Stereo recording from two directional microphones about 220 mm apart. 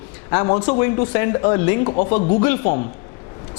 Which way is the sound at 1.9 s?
30° left (ahead or behind).